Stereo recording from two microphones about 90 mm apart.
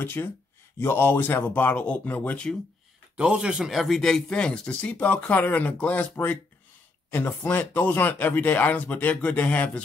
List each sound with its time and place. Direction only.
0.0 s speech: 20° left (ahead or behind)
3.2 s speech: 10° right (ahead or behind); by 9.7 s 20° left (ahead or behind)